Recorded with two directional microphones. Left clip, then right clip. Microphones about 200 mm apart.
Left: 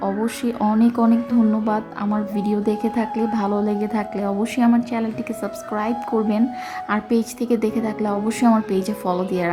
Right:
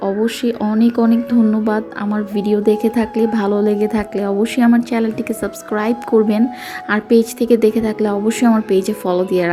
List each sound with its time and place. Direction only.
0.0 s speech: 10° right (ahead or behind)